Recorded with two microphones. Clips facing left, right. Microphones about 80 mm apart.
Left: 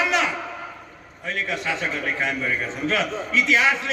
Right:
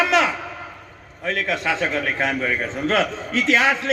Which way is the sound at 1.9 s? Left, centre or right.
Right.